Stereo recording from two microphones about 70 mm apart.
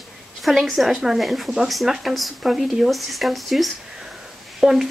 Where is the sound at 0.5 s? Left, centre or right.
Centre.